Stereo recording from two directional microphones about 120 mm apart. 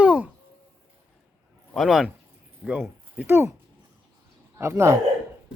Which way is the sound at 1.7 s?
Centre (ahead or behind).